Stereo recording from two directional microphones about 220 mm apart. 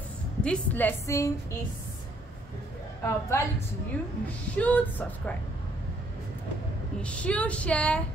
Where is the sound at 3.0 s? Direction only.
10° left (ahead or behind).